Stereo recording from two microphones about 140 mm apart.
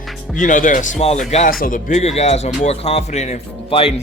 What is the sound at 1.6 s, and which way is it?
Speech, 75° left (ahead or behind).